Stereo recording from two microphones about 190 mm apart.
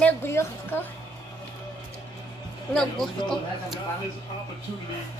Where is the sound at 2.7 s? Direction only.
5° left (ahead or behind).